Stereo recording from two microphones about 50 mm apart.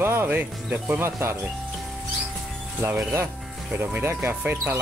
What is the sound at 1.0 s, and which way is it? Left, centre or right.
Speech, right.